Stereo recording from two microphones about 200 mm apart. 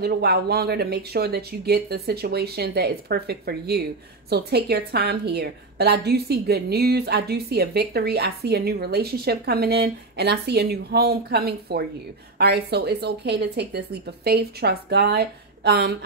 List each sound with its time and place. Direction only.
0.0 s a woman's voice: 55° right (ahead or behind)